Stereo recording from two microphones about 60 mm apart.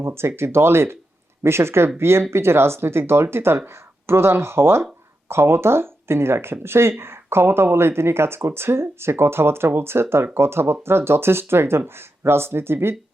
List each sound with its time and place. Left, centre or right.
0.0 s speech: right